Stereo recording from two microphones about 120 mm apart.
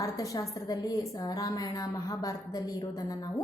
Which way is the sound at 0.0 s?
30° left (ahead or behind).